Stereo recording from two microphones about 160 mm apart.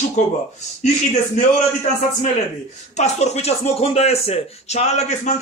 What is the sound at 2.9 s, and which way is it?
Speech, 45° left (ahead or behind).